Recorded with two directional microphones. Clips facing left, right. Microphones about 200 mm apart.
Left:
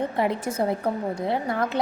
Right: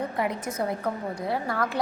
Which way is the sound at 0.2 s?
30° left (ahead or behind).